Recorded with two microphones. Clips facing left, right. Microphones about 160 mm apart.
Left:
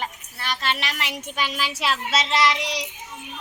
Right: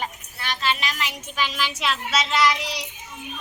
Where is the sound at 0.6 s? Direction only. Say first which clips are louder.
Right 3 dB; 65° left (ahead or behind).